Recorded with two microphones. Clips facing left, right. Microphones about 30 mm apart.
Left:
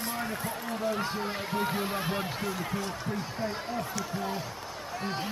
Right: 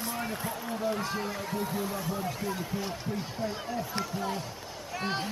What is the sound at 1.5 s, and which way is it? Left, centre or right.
Speech, left.